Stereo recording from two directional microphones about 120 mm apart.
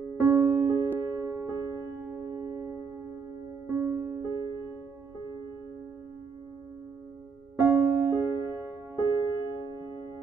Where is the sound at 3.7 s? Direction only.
15° right (ahead or behind).